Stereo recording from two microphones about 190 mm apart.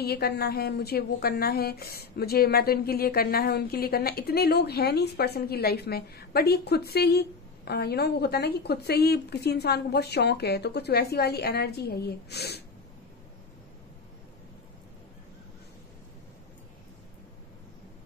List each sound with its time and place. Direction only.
0.0 s a woman's voice: 55° left (ahead or behind)